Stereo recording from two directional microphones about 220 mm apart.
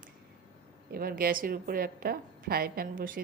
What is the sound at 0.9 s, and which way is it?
A woman's voice, 40° right (ahead or behind).